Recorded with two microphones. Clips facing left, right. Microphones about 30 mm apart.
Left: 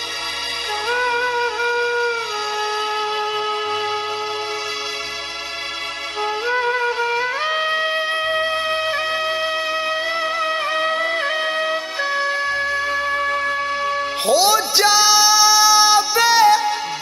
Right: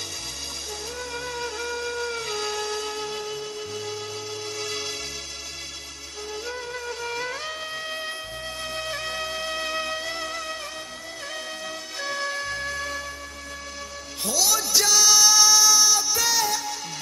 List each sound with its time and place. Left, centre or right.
0.8 s music: left
6.4 s music: left
7.5 s music: left
10.8 s music: left
12.1 s music: left
13.1 s music: left